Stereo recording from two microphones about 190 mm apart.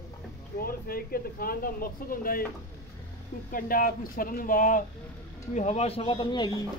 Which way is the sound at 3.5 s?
50° left (ahead or behind).